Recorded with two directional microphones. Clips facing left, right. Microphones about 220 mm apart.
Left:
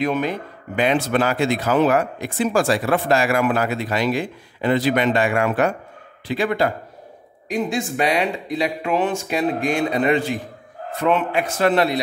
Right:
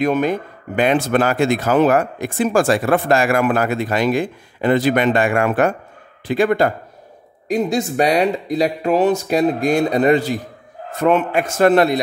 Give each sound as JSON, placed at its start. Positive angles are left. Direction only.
{"t": 0.0, "sound": "speech", "side_deg": -45}